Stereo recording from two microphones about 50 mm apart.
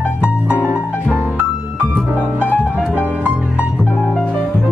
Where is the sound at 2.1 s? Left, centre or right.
Right.